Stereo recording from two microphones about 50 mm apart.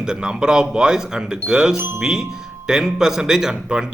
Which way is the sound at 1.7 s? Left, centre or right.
Right.